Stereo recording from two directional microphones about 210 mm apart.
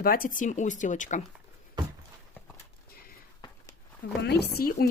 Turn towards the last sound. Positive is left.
turn(degrees=45)  # may be behind; listen again after turning